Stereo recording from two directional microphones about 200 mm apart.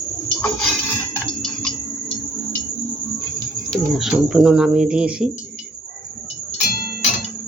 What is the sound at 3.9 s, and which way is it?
Speech, centre (ahead or behind).